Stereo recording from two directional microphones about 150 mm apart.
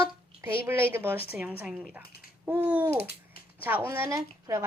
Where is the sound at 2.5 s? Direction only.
15° right (ahead or behind).